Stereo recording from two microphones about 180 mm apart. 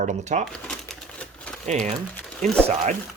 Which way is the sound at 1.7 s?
40° right (ahead or behind).